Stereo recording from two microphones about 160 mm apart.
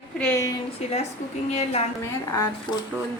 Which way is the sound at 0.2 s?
15° left (ahead or behind).